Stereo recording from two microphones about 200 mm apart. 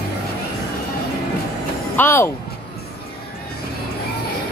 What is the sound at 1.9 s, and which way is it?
Speech, 10° left (ahead or behind).